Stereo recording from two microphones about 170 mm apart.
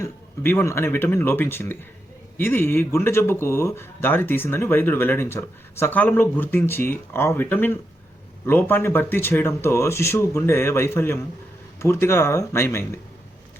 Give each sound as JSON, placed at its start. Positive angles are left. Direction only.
{"t": 0.0, "sound": "speech", "side_deg": 15}